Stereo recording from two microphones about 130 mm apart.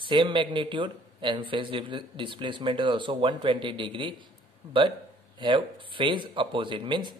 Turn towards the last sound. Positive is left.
turn(degrees=-35)  # may be behind; listen again after turning